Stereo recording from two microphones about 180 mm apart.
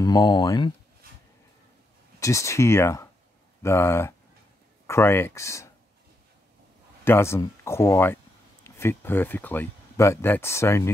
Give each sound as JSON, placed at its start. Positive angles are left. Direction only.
{"t": 0.0, "sound": "speech", "side_deg": 25}
{"t": 2.1, "sound": "speech", "side_deg": 15}
{"t": 7.1, "sound": "speech", "side_deg": 15}